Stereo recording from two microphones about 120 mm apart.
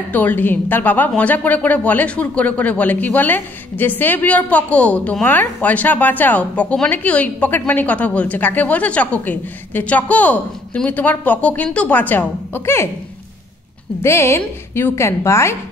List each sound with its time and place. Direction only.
0.1 s a woman's voice: 15° left (ahead or behind)
14.0 s a woman's voice: 20° left (ahead or behind)